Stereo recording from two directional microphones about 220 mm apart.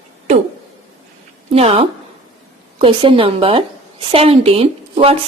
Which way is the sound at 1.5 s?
25° right (ahead or behind).